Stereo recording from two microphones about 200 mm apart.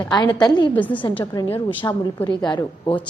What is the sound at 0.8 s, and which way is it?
Speech, 10° left (ahead or behind).